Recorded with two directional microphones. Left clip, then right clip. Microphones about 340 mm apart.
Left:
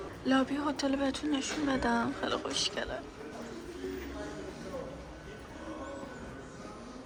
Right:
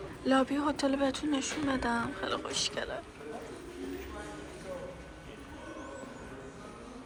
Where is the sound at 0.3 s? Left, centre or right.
Centre.